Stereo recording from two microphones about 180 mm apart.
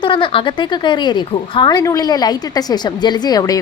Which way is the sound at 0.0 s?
25° left (ahead or behind).